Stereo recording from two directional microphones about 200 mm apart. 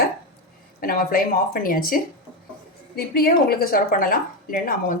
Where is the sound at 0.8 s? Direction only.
45° left (ahead or behind).